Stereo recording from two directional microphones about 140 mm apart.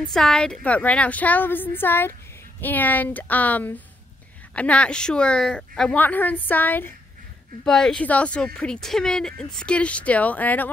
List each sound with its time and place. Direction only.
0.0 s a woman's voice: 5° left (ahead or behind)